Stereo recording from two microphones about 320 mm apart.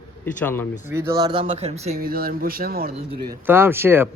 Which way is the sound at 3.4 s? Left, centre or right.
Centre.